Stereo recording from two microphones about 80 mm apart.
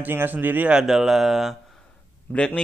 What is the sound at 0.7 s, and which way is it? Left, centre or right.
Speech, centre.